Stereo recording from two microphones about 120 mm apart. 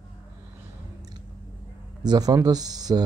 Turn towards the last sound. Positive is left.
turn(degrees=-35)  # may be behind; listen again after turning